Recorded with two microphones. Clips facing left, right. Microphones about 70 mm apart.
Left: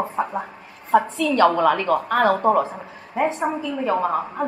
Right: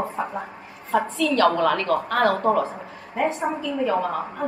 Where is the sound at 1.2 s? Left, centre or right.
Left.